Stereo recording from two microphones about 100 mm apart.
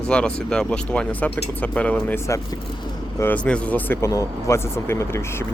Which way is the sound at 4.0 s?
30° left (ahead or behind).